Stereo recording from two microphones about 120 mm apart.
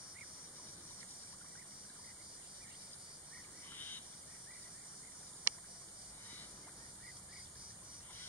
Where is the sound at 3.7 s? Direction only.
15° left (ahead or behind).